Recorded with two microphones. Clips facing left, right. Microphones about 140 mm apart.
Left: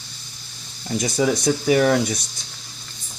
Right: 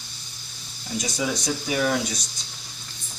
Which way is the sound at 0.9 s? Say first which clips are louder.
Left 7 dB; 55° left (ahead or behind).